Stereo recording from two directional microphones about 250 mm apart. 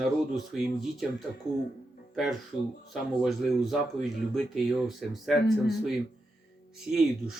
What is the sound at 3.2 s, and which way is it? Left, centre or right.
Speech, centre.